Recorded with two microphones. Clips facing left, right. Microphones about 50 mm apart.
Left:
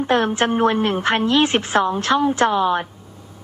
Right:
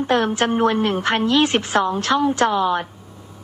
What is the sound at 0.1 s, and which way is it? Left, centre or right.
A woman's voice, left.